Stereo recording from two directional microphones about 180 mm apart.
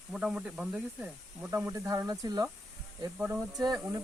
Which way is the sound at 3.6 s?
20° right (ahead or behind).